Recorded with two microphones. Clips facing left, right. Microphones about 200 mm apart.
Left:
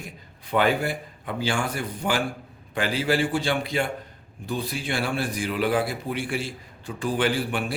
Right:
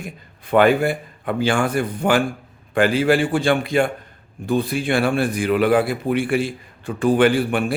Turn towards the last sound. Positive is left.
turn(degrees=-55)  # may be behind; listen again after turning